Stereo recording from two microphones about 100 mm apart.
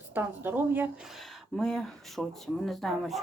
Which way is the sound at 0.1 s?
20° right (ahead or behind).